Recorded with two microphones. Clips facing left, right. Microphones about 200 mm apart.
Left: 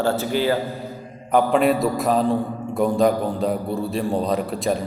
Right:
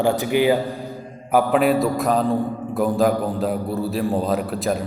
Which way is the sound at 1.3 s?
5° right (ahead or behind).